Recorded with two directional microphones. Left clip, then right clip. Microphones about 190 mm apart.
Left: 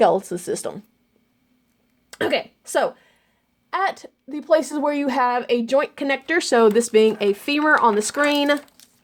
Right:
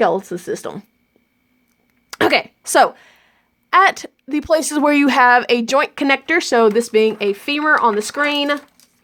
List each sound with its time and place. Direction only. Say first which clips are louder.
0.0 s speech: right 1 dB; 10° right (ahead or behind)
2.0 s a woman's voice: right 7 dB; 35° right (ahead or behind)
6.3 s speech: even; 5° right (ahead or behind)